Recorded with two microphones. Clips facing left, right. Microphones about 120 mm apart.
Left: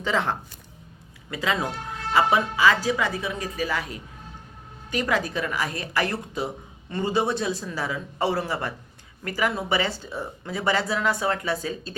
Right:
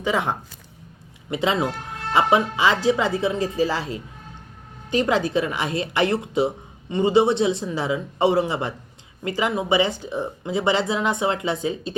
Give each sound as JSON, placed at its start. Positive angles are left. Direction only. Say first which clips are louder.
{"t": 0.0, "sound": "speech", "louder": "right 2 dB", "side_deg": -15}
{"t": 1.3, "sound": "speech", "louder": "right 4 dB", "side_deg": -25}